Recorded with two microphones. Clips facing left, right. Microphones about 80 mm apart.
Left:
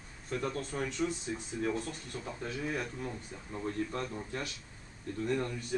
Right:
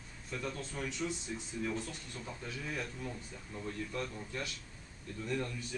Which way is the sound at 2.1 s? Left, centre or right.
Left.